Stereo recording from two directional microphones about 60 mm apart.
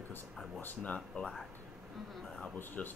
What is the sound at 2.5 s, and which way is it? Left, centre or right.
Speech, left.